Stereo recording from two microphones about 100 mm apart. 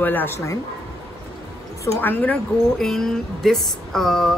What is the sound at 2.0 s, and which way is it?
Speech, 20° left (ahead or behind).